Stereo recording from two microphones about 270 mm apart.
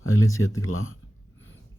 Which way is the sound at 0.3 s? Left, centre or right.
Centre.